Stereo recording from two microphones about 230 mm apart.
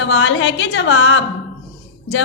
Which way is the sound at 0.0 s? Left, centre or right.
Left.